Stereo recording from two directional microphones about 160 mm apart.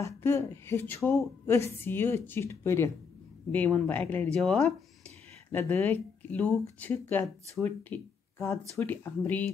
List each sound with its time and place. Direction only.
0.0 s speech: 20° left (ahead or behind); by 4.7 s centre (ahead or behind)
5.5 s speech: 15° left (ahead or behind)